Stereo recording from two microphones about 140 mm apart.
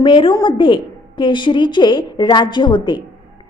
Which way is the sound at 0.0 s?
35° left (ahead or behind).